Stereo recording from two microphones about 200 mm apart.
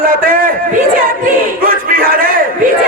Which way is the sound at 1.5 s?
45° right (ahead or behind).